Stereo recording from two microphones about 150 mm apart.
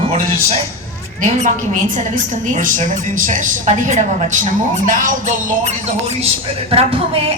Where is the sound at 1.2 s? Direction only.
60° right (ahead or behind).